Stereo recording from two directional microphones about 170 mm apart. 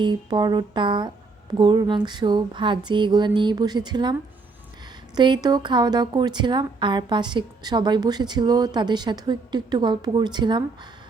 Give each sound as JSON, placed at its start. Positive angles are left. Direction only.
{"t": 0.0, "sound": "a woman's voice", "side_deg": -25}